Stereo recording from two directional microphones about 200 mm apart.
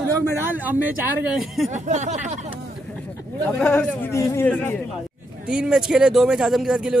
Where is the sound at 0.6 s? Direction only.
10° right (ahead or behind).